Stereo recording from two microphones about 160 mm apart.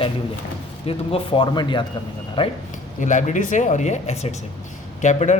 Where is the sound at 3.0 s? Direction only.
50° left (ahead or behind).